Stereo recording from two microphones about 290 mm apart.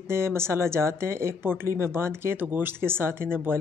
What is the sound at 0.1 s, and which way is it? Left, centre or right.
Speech, centre.